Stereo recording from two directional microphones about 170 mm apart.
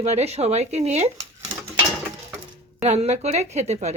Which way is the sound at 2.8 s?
40° right (ahead or behind).